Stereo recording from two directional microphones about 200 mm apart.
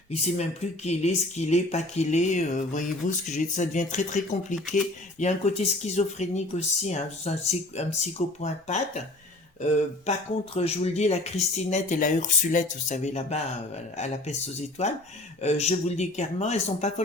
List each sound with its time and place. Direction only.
0.1 s speech: 30° left (ahead or behind)
10.1 s speech: 30° left (ahead or behind)